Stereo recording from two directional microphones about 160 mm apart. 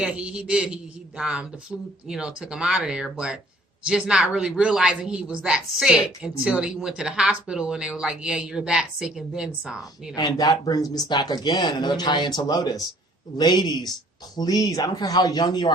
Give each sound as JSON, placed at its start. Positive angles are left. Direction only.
{"t": 0.0, "sound": "speech", "side_deg": -5}
{"t": 10.2, "sound": "speech", "side_deg": 25}